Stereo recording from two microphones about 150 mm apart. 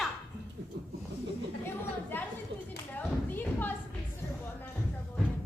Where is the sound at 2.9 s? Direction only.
10° left (ahead or behind).